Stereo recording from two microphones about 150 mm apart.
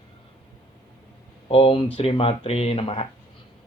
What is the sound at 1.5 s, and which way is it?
Speech, 40° left (ahead or behind).